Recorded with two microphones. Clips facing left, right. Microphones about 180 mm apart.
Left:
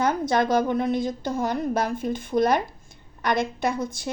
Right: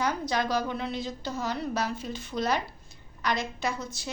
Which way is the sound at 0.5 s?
50° left (ahead or behind).